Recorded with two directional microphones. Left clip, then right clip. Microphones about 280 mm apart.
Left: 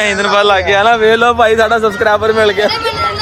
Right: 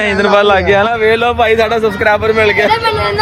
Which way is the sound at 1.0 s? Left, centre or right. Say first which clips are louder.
Left 2 dB; left.